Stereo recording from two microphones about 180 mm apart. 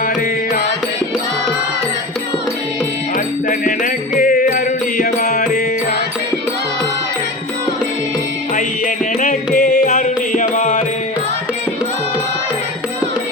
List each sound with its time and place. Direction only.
3.6 s music: 45° left (ahead or behind)
9.6 s music: 45° left (ahead or behind)